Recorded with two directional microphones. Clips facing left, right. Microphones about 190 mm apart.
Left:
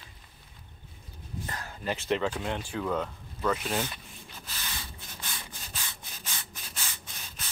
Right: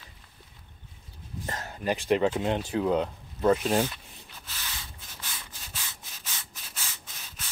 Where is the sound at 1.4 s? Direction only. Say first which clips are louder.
Right 5 dB; 40° right (ahead or behind).